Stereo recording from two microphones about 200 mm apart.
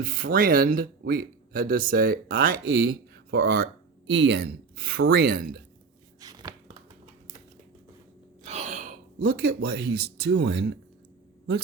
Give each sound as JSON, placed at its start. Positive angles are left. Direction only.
{"t": 0.0, "sound": "speech", "side_deg": -45}
{"t": 6.1, "sound": "chopping", "side_deg": -20}
{"t": 8.4, "sound": "speech", "side_deg": -35}